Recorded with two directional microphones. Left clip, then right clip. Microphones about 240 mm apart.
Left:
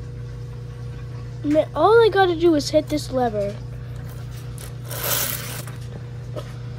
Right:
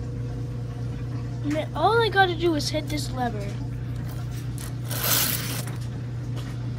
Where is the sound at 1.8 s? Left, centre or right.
Left.